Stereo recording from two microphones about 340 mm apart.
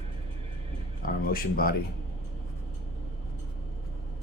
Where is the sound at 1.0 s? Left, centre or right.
Left.